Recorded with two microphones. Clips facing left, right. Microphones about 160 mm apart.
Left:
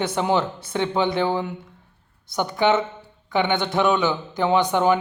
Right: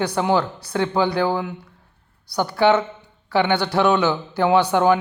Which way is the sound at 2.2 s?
20° left (ahead or behind).